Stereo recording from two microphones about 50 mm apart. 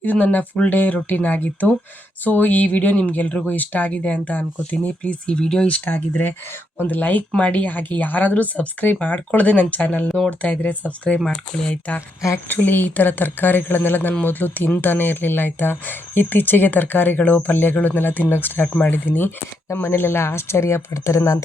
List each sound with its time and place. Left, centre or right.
0.0 s speech: left; by 5.6 s centre
5.6 s speech: left
11.9 s speech: left
12.5 s speech: left
19.7 s speech: left